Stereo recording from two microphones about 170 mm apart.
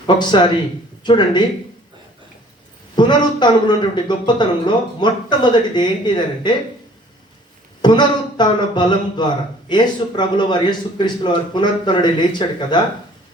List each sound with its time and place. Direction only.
0.1 s speech: 25° left (ahead or behind)
2.9 s speech: 25° left (ahead or behind)
7.8 s speech: 25° left (ahead or behind)